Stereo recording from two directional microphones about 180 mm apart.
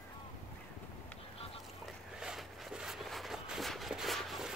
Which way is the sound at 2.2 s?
5° right (ahead or behind).